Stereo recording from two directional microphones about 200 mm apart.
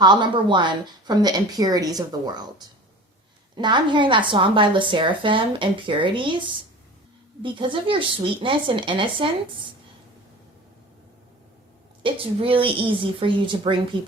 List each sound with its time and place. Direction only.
0.0 s a woman's voice: 20° right (ahead or behind)
12.0 s a woman's voice: 25° right (ahead or behind)